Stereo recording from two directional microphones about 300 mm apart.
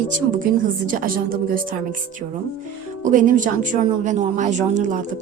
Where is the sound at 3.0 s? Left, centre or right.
Right.